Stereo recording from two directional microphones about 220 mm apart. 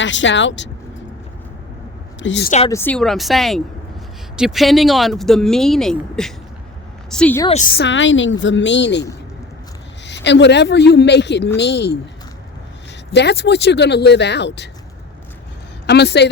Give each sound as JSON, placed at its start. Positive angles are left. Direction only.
{"t": 0.0, "sound": "a woman's voice", "side_deg": 55}
{"t": 2.1, "sound": "speech", "side_deg": 55}
{"t": 2.6, "sound": "speech", "side_deg": 10}
{"t": 7.4, "sound": "a woman's voice", "side_deg": 30}
{"t": 7.7, "sound": "a woman's voice", "side_deg": 50}
{"t": 10.1, "sound": "a woman's voice", "side_deg": 50}
{"t": 13.1, "sound": "a woman's voice", "side_deg": 50}
{"t": 15.9, "sound": "a woman's voice", "side_deg": 50}